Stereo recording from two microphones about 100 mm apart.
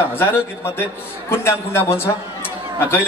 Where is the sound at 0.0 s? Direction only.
20° left (ahead or behind).